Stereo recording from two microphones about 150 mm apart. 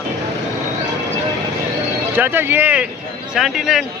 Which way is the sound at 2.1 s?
15° right (ahead or behind).